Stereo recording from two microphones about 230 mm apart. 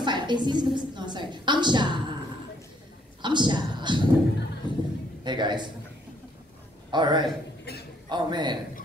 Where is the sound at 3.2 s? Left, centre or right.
Centre.